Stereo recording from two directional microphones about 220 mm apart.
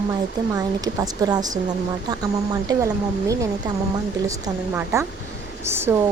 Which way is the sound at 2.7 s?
20° right (ahead or behind).